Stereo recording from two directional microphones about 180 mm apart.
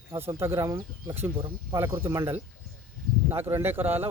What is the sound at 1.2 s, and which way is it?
Speech, 30° right (ahead or behind).